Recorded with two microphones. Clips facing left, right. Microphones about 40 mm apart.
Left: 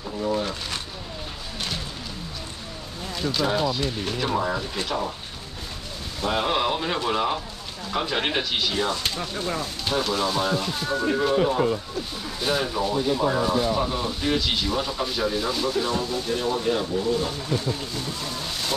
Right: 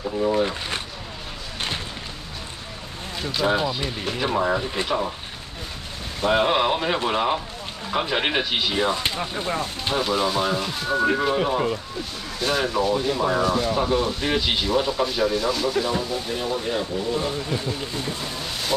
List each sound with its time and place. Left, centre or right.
0.0 s speech: centre
3.2 s speech: centre
6.2 s speech: centre
9.9 s speech: centre
12.4 s speech: centre
13.4 s speech: centre
13.7 s speech: centre
15.9 s speech: centre
17.1 s speech: right